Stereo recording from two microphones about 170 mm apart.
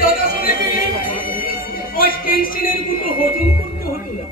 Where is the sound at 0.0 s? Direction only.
55° left (ahead or behind).